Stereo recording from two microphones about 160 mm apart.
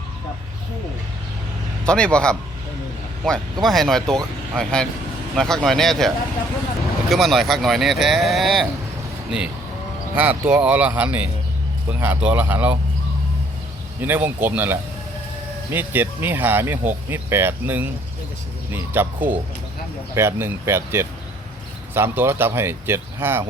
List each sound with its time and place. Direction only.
1.8 s speech: 5° left (ahead or behind)
10.2 s speech: 10° right (ahead or behind)
14.0 s speech: 10° right (ahead or behind)